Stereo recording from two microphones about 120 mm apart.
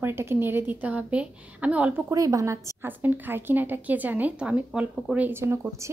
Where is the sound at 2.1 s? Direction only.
30° right (ahead or behind).